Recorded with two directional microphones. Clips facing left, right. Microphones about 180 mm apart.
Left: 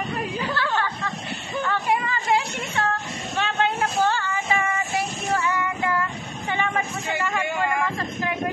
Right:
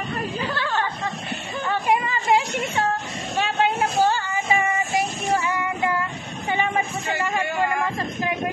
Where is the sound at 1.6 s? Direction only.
20° right (ahead or behind).